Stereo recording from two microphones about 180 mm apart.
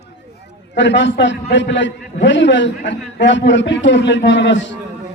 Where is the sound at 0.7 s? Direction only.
90° left.